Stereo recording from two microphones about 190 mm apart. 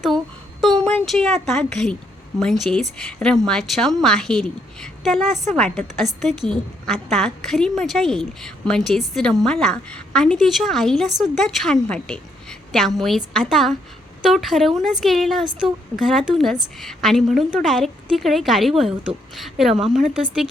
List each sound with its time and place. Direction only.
0.6 s a child's voice: centre (ahead or behind)